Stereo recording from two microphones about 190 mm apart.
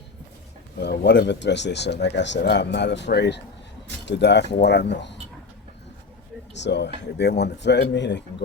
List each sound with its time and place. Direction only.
0.8 s speech: 65° left (ahead or behind)
6.5 s speech: 65° left (ahead or behind)